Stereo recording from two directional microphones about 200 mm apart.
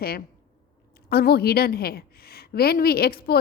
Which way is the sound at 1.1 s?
50° left (ahead or behind).